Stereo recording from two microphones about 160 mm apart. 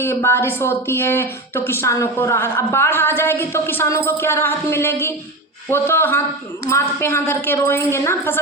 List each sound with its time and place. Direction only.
0.0 s speech: 15° left (ahead or behind)